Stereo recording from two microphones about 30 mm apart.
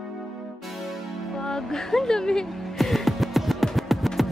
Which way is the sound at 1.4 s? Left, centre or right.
Left.